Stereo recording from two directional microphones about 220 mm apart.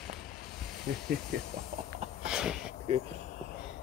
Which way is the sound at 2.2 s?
5° right (ahead or behind).